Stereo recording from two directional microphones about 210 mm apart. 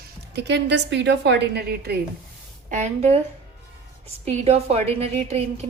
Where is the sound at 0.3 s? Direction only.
55° right (ahead or behind).